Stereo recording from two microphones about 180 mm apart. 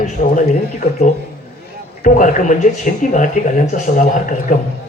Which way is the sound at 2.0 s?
45° left (ahead or behind).